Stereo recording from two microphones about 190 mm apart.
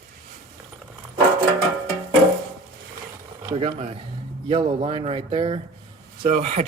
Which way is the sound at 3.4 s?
30° right (ahead or behind).